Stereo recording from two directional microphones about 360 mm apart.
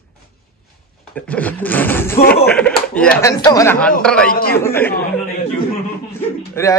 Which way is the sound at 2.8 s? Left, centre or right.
Centre.